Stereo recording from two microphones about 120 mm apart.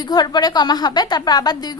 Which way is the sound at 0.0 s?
35° left (ahead or behind).